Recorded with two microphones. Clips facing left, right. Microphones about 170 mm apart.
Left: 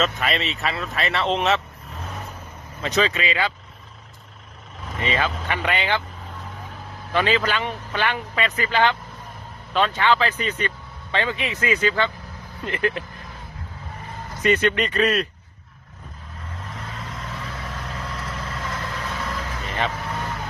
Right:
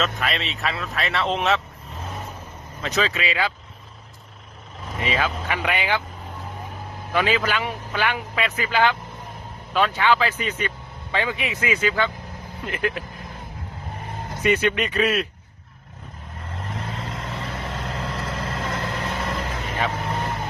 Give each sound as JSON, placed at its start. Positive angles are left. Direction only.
{"t": 0.0, "sound": "speech", "side_deg": 0}
{"t": 4.9, "sound": "speech", "side_deg": -5}
{"t": 7.1, "sound": "a man's voice", "side_deg": -10}
{"t": 14.4, "sound": "a man's voice", "side_deg": -5}
{"t": 16.7, "sound": "vehicle", "side_deg": -30}
{"t": 18.8, "sound": "vehicle", "side_deg": -50}
{"t": 19.1, "sound": "vehicle", "side_deg": -30}